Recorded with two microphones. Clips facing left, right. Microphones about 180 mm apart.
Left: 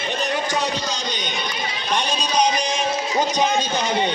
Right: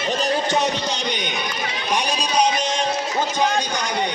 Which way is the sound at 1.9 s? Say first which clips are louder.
Even; 10° right (ahead or behind).